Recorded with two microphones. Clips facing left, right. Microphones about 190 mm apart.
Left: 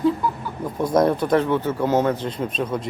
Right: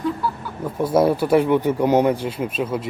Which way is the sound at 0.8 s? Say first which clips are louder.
Right 1 dB; 5° right (ahead or behind).